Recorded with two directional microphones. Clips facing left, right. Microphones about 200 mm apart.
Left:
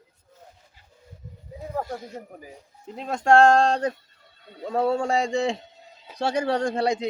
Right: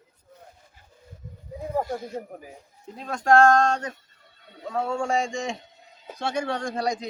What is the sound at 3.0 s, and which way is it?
Speech, 25° left (ahead or behind).